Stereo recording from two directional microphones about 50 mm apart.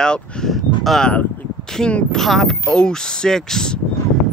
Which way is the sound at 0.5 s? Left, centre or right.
Centre.